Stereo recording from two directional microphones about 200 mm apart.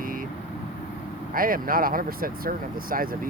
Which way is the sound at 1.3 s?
45° right (ahead or behind).